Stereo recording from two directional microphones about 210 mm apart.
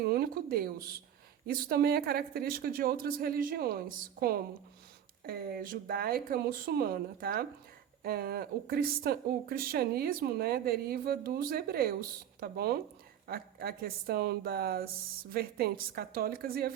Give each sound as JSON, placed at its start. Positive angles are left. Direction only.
{"t": 0.0, "sound": "speech", "side_deg": -45}